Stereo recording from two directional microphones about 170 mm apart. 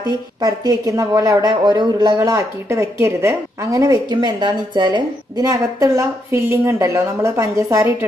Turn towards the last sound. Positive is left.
turn(degrees=-20)  # may be behind; listen again after turning